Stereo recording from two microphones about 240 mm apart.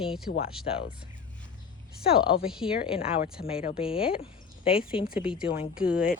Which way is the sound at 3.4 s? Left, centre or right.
Left.